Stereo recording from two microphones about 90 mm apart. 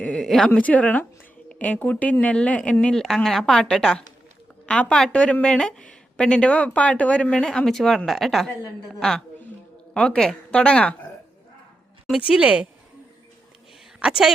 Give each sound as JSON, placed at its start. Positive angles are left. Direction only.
{"t": 0.0, "sound": "a woman's voice", "side_deg": 10}
{"t": 12.4, "sound": "a woman's voice", "side_deg": -15}
{"t": 14.0, "sound": "a woman's voice", "side_deg": -5}